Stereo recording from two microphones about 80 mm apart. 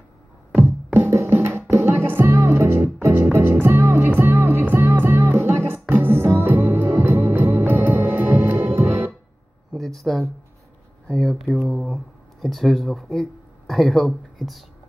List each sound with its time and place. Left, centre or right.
0.9 s music: right
9.8 s a sound: centre
11.1 s speech: centre